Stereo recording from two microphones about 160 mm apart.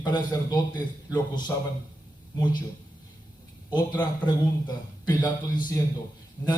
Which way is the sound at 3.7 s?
25° left (ahead or behind).